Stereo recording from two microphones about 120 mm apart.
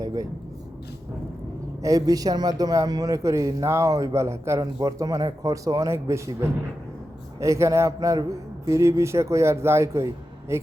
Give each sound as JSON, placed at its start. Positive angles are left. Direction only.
{"t": 0.0, "sound": "vehicle", "side_deg": -30}
{"t": 1.8, "sound": "speech", "side_deg": -30}